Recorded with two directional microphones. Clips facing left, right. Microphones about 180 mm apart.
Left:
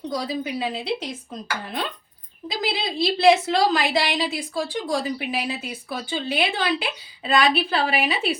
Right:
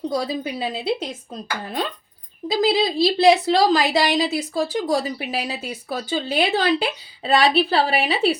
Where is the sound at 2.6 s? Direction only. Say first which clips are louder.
Right 6 dB; 35° right (ahead or behind).